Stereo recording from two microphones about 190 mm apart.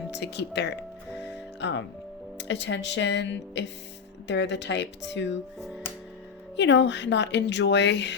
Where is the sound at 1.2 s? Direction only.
65° left (ahead or behind).